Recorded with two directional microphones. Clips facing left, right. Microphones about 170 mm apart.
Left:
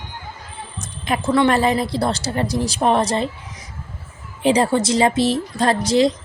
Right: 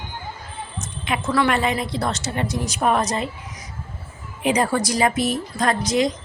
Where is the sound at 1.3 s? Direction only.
25° left (ahead or behind).